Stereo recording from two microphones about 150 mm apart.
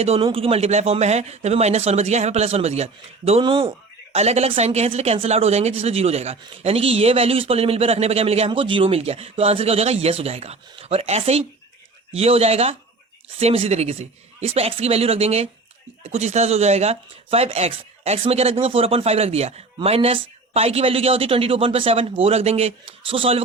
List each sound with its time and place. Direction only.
0.0 s speech: 40° right (ahead or behind)
4.1 s speech: 45° right (ahead or behind)